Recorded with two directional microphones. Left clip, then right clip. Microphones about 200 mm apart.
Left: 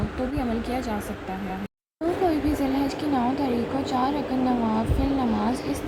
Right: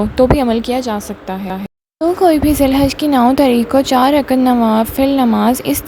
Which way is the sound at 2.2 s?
55° right (ahead or behind).